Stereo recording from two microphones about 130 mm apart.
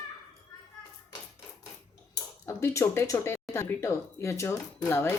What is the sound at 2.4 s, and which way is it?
Speech, 20° left (ahead or behind).